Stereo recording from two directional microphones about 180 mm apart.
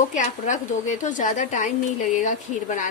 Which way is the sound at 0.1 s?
45° left (ahead or behind).